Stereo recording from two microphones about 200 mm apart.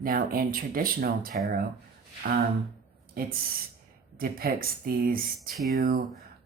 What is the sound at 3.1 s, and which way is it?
Speech, 50° right (ahead or behind).